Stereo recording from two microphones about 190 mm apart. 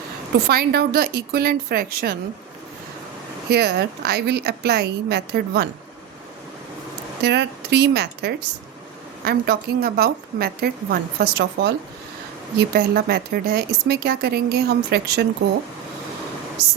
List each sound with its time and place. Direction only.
0.4 s speech: 55° right (ahead or behind)
3.5 s speech: 60° right (ahead or behind)
7.2 s a woman's voice: 60° right (ahead or behind)